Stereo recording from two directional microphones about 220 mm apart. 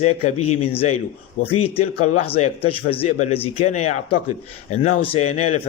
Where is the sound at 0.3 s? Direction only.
90° left.